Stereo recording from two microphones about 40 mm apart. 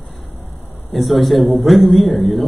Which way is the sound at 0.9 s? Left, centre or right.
Centre.